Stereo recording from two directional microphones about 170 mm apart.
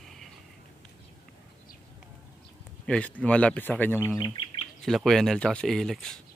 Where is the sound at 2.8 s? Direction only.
5° left (ahead or behind).